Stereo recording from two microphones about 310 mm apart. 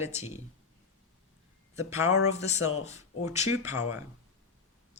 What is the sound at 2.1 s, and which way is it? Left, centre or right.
Speech, left.